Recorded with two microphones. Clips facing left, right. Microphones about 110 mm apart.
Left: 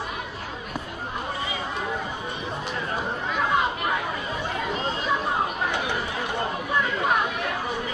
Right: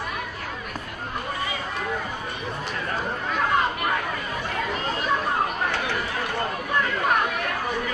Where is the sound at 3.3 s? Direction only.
10° left (ahead or behind).